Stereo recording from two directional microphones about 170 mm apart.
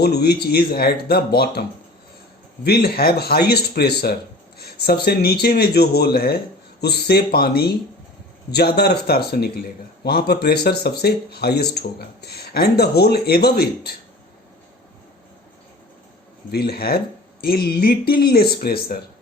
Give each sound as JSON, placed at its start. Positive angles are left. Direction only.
{"t": 0.0, "sound": "speech", "side_deg": 70}
{"t": 2.6, "sound": "speech", "side_deg": 65}
{"t": 4.5, "sound": "a sound", "side_deg": 65}
{"t": 5.0, "sound": "speech", "side_deg": 65}
{"t": 16.5, "sound": "speech", "side_deg": 65}